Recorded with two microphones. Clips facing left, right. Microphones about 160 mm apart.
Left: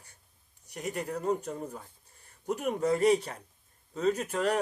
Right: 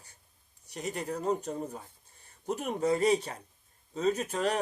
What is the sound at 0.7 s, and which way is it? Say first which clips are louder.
Speech: even; 25° right (ahead or behind).